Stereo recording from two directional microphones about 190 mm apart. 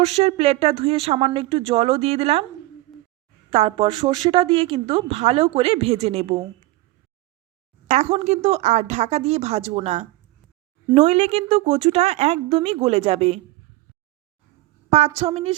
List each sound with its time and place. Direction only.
0.0 s speech: 35° right (ahead or behind)
3.5 s a woman's voice: 30° right (ahead or behind)
7.9 s speech: 35° right (ahead or behind)
14.8 s a woman's voice: 35° right (ahead or behind)